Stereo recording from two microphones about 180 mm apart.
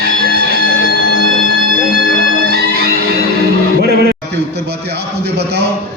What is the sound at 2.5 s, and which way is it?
Music, 60° right (ahead or behind).